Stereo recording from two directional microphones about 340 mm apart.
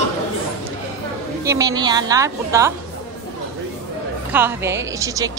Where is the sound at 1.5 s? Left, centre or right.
Centre.